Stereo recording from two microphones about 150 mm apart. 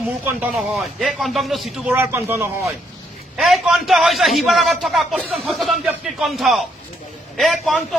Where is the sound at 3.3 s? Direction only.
Centre (ahead or behind).